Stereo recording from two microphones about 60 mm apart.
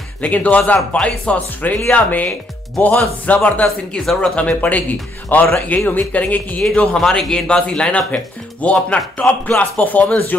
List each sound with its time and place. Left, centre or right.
0.2 s speech: left
0.7 s a man's voice: centre
1.2 s speech: left
4.0 s speech: centre
4.4 s speech: left
6.7 s a man's voice: centre